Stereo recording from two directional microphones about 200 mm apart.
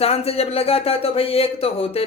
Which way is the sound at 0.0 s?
30° left (ahead or behind).